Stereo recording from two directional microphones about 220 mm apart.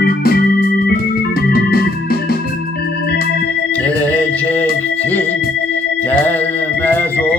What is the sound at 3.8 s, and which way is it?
Music, 5° left (ahead or behind).